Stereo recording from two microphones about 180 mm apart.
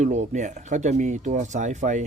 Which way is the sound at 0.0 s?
40° right (ahead or behind).